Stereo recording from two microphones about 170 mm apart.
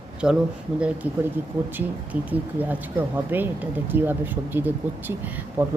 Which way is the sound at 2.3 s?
10° right (ahead or behind).